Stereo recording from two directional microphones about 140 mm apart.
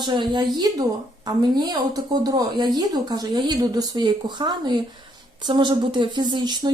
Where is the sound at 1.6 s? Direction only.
30° right (ahead or behind).